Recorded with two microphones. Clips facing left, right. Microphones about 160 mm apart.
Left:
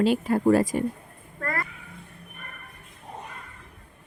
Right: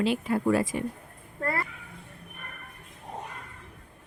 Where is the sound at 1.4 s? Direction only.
25° right (ahead or behind).